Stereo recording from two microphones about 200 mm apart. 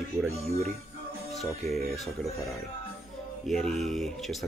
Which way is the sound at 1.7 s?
Centre (ahead or behind).